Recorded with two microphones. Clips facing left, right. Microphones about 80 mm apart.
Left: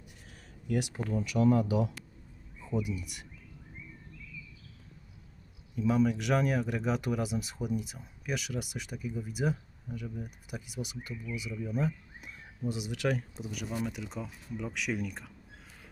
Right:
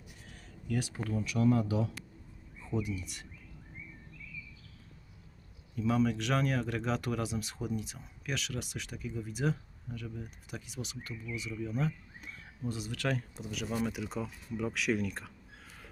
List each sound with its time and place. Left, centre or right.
0.7 s speech: centre
2.7 s speech: centre
5.7 s speech: centre